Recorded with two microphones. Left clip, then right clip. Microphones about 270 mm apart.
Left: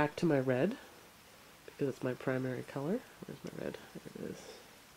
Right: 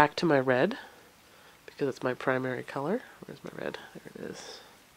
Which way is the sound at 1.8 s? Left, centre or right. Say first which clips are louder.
Right 6 dB; centre.